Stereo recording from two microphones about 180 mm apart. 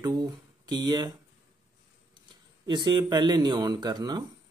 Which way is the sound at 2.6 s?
25° right (ahead or behind).